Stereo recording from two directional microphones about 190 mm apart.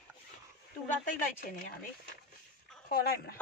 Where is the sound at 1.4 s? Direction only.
45° left (ahead or behind).